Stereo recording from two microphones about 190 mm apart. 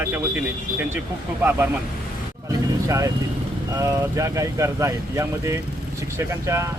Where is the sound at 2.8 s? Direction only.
15° right (ahead or behind).